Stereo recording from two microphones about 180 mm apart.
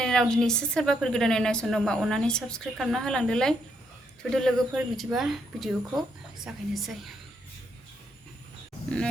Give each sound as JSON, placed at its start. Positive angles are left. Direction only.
{"t": 0.0, "sound": "a woman's voice", "side_deg": 5}